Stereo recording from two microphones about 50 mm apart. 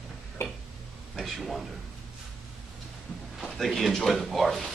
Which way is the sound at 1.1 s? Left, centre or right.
Centre.